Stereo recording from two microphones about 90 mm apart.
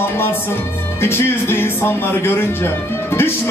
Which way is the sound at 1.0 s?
25° left (ahead or behind).